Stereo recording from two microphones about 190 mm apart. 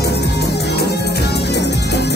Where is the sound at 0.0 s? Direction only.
60° left (ahead or behind).